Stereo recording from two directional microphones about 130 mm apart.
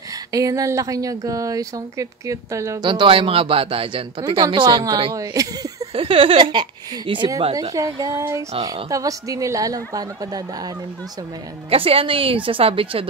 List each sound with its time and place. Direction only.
0.3 s a woman's voice: 25° right (ahead or behind)
2.8 s speech: 35° right (ahead or behind)
5.9 s a woman's voice: 45° right (ahead or behind); by 10.7 s 30° right (ahead or behind)
11.7 s a woman's voice: 45° right (ahead or behind)